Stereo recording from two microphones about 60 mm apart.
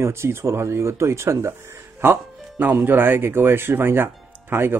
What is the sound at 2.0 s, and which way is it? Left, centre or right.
A man's voice, right.